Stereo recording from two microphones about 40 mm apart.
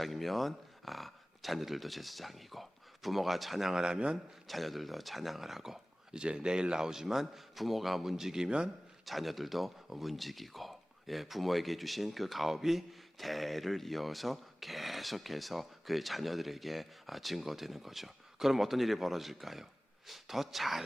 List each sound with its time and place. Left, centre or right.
0.0 s speech: centre
3.7 s speech: centre
4.4 s speech: centre
6.1 s a man's voice: right; by 8.1 s centre
8.1 s a man's voice: centre
9.0 s speech: centre